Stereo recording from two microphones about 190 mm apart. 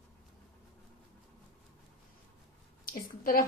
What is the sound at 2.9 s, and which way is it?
Speech, 50° left (ahead or behind).